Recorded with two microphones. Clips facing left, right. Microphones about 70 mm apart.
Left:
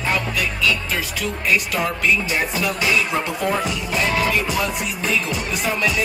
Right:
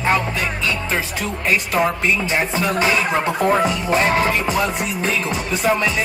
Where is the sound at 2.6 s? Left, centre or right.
Right.